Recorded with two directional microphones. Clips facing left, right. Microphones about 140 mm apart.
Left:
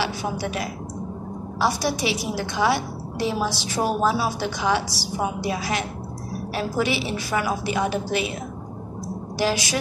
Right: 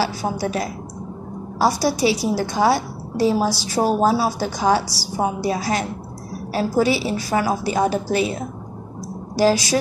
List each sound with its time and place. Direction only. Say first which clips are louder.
0.0 s a woman's voice: right 4 dB; 40° right (ahead or behind)
9.4 s a woman's voice: right 7 dB; 40° right (ahead or behind)